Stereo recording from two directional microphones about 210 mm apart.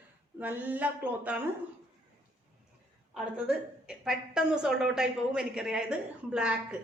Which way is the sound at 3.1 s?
5° right (ahead or behind).